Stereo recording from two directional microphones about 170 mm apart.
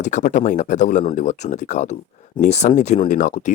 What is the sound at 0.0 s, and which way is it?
Speech, 45° left (ahead or behind).